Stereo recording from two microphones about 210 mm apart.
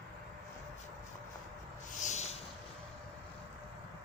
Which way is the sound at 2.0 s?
35° left (ahead or behind).